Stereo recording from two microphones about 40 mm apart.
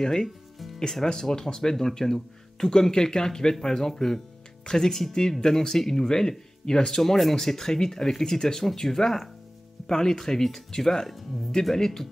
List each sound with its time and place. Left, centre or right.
0.0 s speech: centre
7.0 s speech: centre